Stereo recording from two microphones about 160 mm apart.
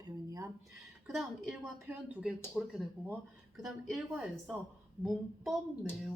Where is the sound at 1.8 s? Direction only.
10° right (ahead or behind).